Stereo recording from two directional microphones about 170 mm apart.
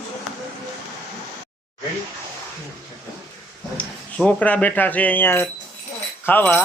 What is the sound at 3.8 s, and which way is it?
Speech, 10° left (ahead or behind).